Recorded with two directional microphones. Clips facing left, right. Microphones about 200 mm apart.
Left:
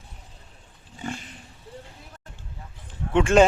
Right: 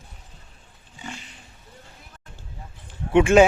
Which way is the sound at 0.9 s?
50° left (ahead or behind).